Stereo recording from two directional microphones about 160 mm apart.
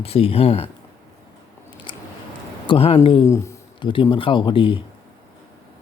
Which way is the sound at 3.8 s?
30° left (ahead or behind).